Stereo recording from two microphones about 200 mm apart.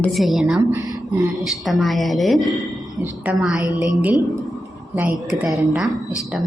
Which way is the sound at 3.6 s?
20° left (ahead or behind).